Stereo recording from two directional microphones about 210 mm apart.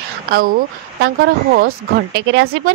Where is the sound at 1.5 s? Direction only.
45° right (ahead or behind).